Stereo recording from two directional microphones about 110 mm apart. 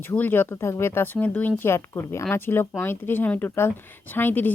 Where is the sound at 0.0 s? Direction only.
20° left (ahead or behind).